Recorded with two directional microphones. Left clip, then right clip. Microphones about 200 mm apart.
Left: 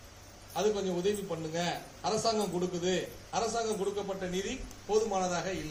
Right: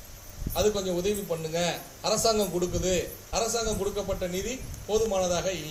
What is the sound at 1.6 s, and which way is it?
A man's voice, 50° right (ahead or behind).